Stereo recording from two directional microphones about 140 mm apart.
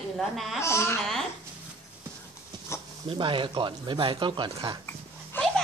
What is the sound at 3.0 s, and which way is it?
Speech, 35° right (ahead or behind).